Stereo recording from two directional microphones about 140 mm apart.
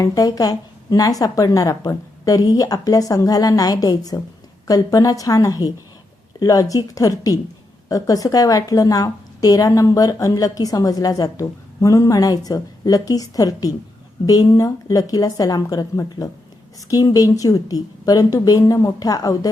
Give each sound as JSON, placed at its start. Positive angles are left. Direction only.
{"t": 0.0, "sound": "a woman's voice", "side_deg": 25}